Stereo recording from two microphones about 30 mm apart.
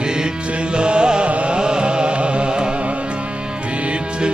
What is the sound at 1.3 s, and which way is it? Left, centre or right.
Music, right.